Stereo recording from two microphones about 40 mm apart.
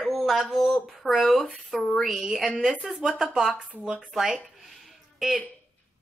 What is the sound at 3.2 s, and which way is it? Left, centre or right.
Speech, centre.